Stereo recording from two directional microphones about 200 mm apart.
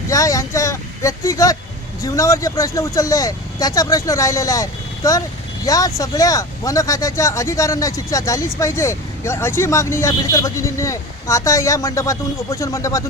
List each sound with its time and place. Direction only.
0.1 s speech: 15° left (ahead or behind)